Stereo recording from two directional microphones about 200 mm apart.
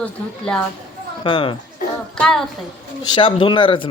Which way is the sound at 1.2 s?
25° left (ahead or behind).